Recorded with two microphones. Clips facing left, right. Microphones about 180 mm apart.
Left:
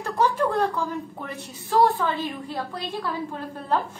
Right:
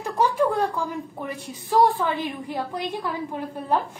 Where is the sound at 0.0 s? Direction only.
10° right (ahead or behind).